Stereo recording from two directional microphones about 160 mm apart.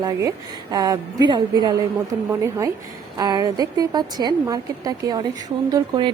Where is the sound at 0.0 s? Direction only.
20° right (ahead or behind).